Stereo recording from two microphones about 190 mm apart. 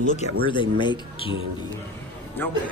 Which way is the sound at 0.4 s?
25° left (ahead or behind).